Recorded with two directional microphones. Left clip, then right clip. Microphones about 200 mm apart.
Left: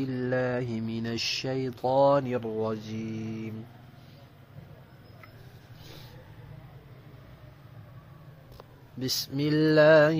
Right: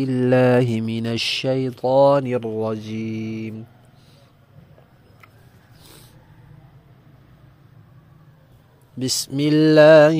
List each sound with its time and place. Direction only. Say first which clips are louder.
0.0 s speech: right 12 dB; 40° right (ahead or behind)
9.0 s speech: right 8 dB; 40° right (ahead or behind)